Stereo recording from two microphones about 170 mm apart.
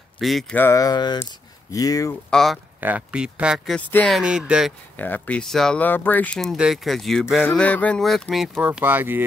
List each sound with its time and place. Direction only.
0.2 s speech: centre (ahead or behind)
0.6 s speech: 15° left (ahead or behind)
2.3 s speech: centre (ahead or behind)
4.2 s speech: 5° right (ahead or behind)
4.9 s speech: 10° left (ahead or behind)
8.5 s speech: 10° right (ahead or behind)